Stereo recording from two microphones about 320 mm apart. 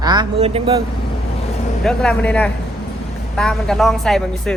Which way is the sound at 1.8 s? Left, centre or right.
Centre.